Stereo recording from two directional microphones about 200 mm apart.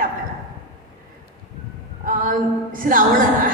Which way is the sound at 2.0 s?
40° right (ahead or behind).